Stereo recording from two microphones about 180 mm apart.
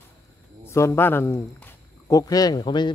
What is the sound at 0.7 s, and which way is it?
A man's voice, 15° left (ahead or behind).